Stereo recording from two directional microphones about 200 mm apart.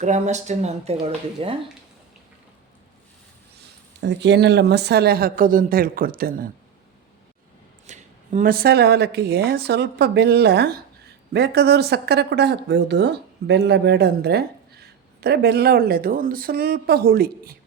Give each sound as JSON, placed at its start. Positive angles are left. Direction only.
{"t": 0.0, "sound": "speech", "side_deg": -35}
{"t": 4.0, "sound": "speech", "side_deg": -60}
{"t": 7.9, "sound": "speech", "side_deg": -40}